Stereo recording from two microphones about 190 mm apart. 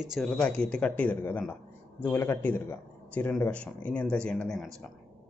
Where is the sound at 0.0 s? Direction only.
Centre (ahead or behind).